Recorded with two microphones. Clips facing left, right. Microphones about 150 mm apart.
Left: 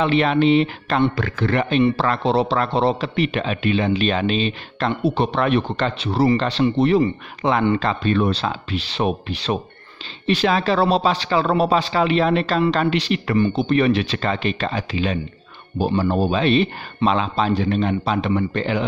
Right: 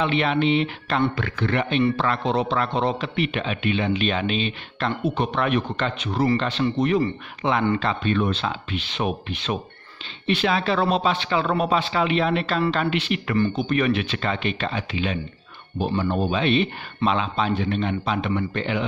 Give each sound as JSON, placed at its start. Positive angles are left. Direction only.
{"t": 0.0, "sound": "a man's voice", "side_deg": 40}